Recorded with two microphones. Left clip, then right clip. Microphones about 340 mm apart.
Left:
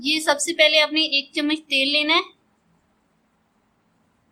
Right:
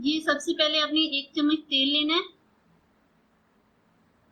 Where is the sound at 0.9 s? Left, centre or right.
Left.